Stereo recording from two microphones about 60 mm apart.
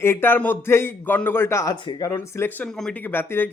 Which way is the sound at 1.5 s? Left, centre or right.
Left.